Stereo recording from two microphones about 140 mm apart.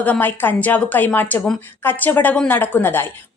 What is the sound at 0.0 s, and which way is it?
A woman's voice, 10° left (ahead or behind).